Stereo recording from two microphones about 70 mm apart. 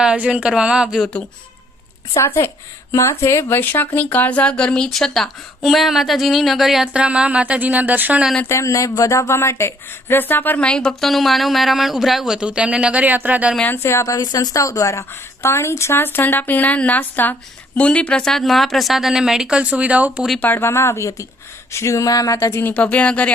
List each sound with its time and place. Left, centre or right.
0.0 s speech: centre
2.2 s a woman's voice: left
3.6 s a woman's voice: left; by 6.8 s centre
6.8 s speech: centre
8.4 s a woman's voice: left
10.6 s speech: centre
11.0 s speech: centre; by 13.5 s right
13.8 s a woman's voice: left; by 20.2 s centre
20.6 s a woman's voice: left
22.6 s a woman's voice: centre